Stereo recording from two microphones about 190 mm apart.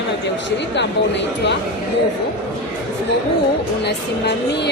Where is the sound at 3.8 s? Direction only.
65° left (ahead or behind).